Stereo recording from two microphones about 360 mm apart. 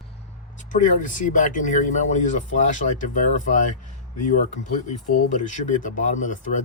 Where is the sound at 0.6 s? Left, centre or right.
Left.